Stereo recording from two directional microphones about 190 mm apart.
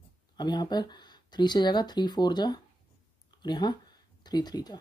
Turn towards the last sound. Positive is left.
turn(degrees=20)  # may be behind; listen again after turning